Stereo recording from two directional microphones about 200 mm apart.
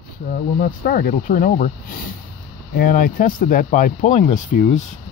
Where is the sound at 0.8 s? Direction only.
45° left (ahead or behind).